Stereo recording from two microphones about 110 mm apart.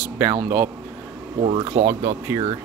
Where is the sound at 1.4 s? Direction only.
80° right.